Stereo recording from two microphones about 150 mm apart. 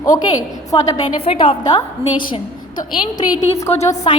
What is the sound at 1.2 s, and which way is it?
A woman's voice, 35° left (ahead or behind).